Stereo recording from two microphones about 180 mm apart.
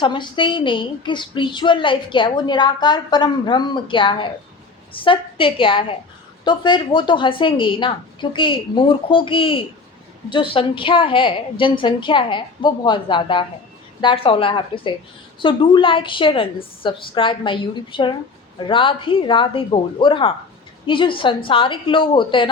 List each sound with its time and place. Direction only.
0.0 s a woman's voice: 25° left (ahead or behind)